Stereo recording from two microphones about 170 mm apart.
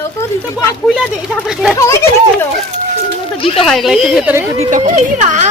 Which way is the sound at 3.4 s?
35° left (ahead or behind).